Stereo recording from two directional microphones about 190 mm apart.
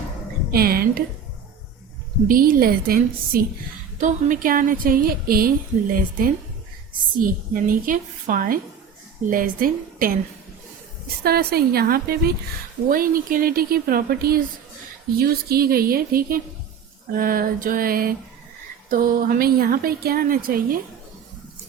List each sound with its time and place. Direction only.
0.5 s a woman's voice: 50° right (ahead or behind)
2.2 s a woman's voice: 50° right (ahead or behind)
11.2 s a woman's voice: 55° right (ahead or behind)